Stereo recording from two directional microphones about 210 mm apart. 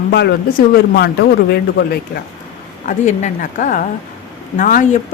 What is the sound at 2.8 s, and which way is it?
A woman's voice, 35° left (ahead or behind).